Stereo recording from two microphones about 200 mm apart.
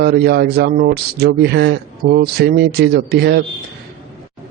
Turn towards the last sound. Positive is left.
turn(degrees=-55)  # may be behind; listen again after turning